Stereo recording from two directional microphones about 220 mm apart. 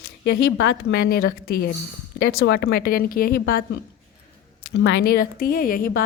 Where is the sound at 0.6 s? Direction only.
55° left (ahead or behind).